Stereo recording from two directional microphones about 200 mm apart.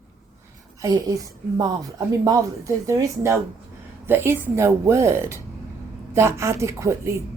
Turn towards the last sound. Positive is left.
turn(degrees=-15)  # may be behind; listen again after turning